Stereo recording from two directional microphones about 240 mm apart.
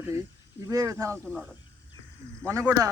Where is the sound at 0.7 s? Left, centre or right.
Centre.